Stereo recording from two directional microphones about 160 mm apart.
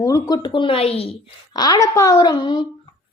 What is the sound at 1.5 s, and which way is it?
A woman's voice, 25° left (ahead or behind).